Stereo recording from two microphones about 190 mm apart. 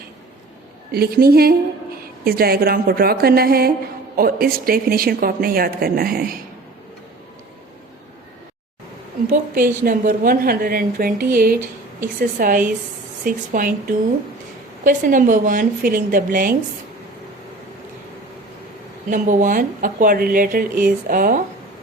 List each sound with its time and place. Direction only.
0.9 s a woman's voice: 55° right (ahead or behind)
9.8 s a woman's voice: 50° right (ahead or behind)
19.1 s a woman's voice: 40° right (ahead or behind)